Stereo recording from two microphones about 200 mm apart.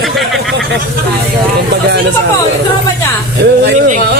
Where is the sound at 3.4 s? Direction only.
55° right (ahead or behind).